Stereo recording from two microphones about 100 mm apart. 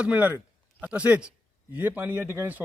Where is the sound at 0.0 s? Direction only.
15° right (ahead or behind).